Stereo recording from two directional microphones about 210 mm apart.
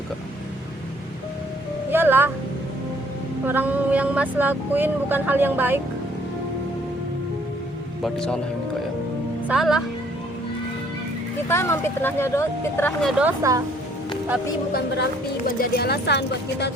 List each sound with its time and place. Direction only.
1.9 s music: 10° right (ahead or behind)
3.4 s speech: 10° right (ahead or behind)
8.0 s speech: 5° left (ahead or behind)
9.5 s speech: centre (ahead or behind)
11.4 s speech: 10° left (ahead or behind)
15.5 s speech: 45° left (ahead or behind)